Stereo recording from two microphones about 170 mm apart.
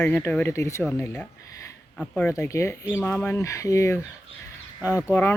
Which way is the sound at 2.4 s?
15° left (ahead or behind).